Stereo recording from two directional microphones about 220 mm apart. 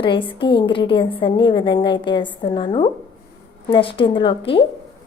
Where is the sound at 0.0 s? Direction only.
20° left (ahead or behind).